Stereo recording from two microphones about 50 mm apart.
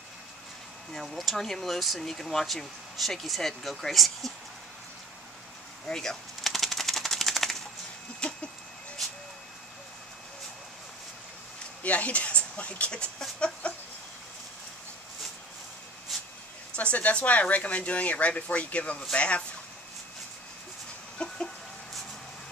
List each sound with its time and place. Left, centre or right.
0.9 s speech: centre
5.9 s speech: centre
6.4 s typewriter: centre
8.2 s a sound: left
11.8 s speech: left
13.4 s chicken: left
16.1 s a sound: centre
16.7 s speech: left
21.2 s chicken: centre